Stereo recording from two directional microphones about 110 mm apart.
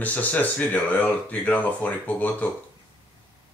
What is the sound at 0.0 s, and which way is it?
Speech, 15° left (ahead or behind).